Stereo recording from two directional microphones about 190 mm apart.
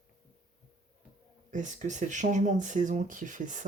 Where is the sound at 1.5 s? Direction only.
40° right (ahead or behind).